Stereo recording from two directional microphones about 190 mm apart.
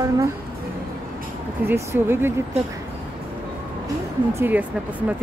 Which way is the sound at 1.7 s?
10° right (ahead or behind).